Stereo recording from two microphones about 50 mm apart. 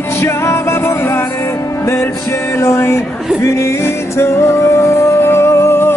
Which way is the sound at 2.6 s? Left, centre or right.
Left.